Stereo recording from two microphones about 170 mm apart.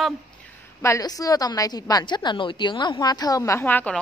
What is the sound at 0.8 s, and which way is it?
Speech, 20° left (ahead or behind).